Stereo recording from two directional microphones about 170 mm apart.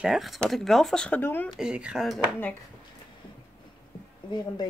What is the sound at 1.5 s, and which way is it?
Speech, 5° right (ahead or behind).